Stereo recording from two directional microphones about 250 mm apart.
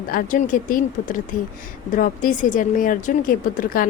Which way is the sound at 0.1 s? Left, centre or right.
Left.